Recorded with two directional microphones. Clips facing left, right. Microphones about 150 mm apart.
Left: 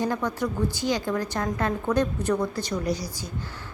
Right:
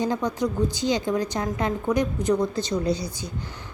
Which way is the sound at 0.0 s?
20° right (ahead or behind).